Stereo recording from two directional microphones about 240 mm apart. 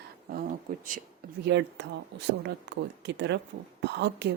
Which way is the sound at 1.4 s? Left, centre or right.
Right.